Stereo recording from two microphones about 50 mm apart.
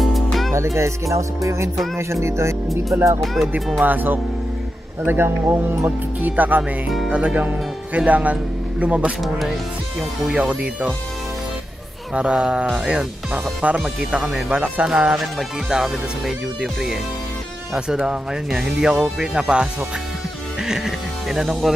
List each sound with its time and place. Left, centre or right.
0.0 s music: centre
0.7 s music: right
2.0 s speech: right
3.8 s speech: right
7.1 s speech: right
10.3 s speech: right
12.1 s speech: right
15.1 s speech: centre
18.0 s speech: centre